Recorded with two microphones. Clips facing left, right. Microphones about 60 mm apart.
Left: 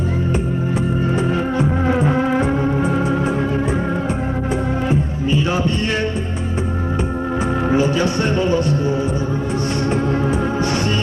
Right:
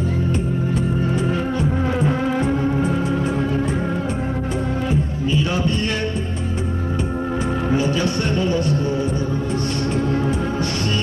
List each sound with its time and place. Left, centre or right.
1.1 s music: left
5.5 s a sound: left
7.3 s speech: left
9.8 s music: left